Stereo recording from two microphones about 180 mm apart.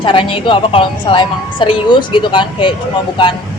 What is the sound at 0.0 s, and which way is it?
A woman's voice, 30° left (ahead or behind).